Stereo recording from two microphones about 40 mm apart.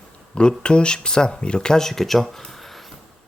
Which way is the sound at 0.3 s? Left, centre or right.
Left.